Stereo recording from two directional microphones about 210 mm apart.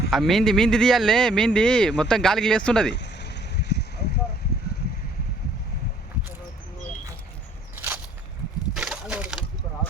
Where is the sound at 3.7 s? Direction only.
50° left (ahead or behind).